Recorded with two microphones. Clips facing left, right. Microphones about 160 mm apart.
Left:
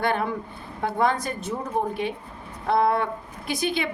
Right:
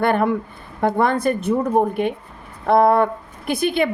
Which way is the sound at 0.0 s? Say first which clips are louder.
Right 7 dB; 55° right (ahead or behind).